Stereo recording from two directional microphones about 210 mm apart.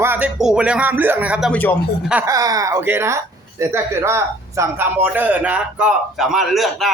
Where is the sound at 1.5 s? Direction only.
10° left (ahead or behind).